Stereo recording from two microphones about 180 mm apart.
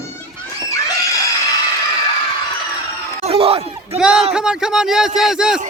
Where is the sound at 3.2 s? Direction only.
30° right (ahead or behind).